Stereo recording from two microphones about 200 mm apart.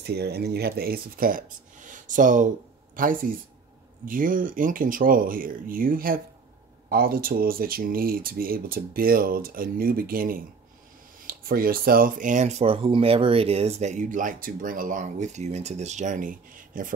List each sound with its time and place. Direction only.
0.0 s speech: 55° right (ahead or behind)